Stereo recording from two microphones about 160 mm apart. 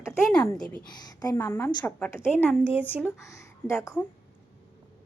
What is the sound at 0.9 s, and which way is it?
Speech, 25° left (ahead or behind).